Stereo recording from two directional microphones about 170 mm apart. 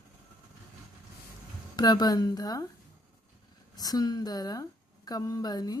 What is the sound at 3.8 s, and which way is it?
Speech, 20° left (ahead or behind).